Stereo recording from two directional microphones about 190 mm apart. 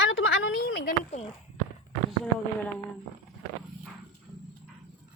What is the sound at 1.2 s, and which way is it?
Speech, 35° left (ahead or behind).